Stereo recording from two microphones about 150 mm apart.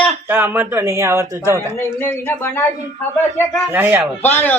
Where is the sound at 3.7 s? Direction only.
15° right (ahead or behind).